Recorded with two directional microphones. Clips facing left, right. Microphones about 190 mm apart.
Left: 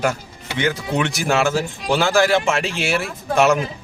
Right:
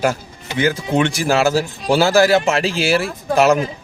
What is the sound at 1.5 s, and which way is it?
Speech, 35° right (ahead or behind).